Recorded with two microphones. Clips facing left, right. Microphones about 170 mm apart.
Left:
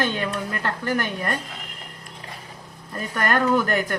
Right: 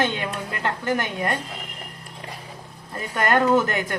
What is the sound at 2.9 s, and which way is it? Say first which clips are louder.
A woman's voice: right 2 dB; 20° right (ahead or behind).